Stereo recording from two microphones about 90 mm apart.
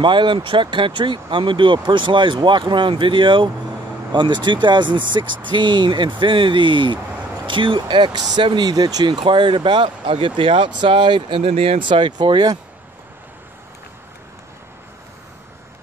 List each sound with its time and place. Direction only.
0.0 s speech: 60° right (ahead or behind)